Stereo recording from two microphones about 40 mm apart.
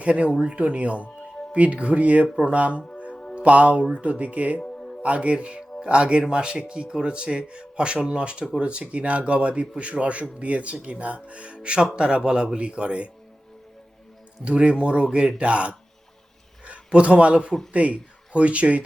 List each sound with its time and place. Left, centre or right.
0.0 s a man's voice: right
14.4 s a man's voice: right